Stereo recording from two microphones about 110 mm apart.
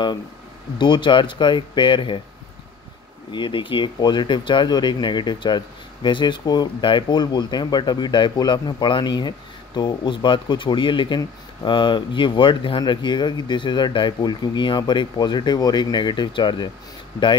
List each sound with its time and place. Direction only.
0.7 s speech: 45° left (ahead or behind)
3.3 s speech: 45° left (ahead or behind)